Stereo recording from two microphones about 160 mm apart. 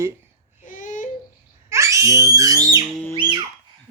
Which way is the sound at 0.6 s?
55° left (ahead or behind).